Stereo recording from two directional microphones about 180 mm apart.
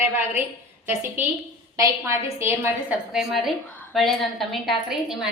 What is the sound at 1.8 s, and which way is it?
Speech, 15° right (ahead or behind).